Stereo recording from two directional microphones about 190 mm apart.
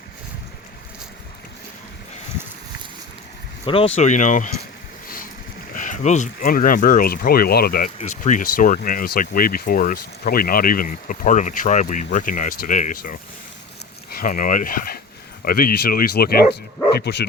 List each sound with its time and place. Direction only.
3.9 s speech: 40° left (ahead or behind)
5.0 s boat: 50° left (ahead or behind)
5.7 s speech: 45° left (ahead or behind)
7.9 s speech: 40° left (ahead or behind); by 17.2 s 60° left (ahead or behind)